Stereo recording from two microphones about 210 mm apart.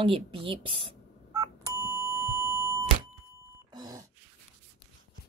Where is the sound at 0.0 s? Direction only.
25° right (ahead or behind).